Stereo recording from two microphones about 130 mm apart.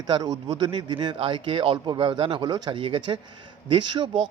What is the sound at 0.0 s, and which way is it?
A man's voice, 30° right (ahead or behind).